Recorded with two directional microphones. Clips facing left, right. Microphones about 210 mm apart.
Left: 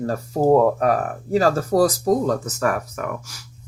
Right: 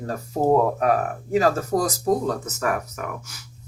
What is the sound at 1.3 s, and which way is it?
Speech, 35° left (ahead or behind).